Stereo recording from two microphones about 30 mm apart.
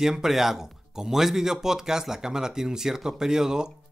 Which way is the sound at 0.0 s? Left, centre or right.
Centre.